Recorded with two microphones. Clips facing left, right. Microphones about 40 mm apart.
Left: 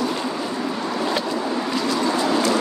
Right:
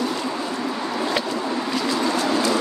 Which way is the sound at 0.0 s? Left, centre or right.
Centre.